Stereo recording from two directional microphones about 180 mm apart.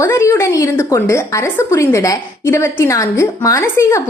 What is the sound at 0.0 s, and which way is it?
A woman's voice, 15° left (ahead or behind).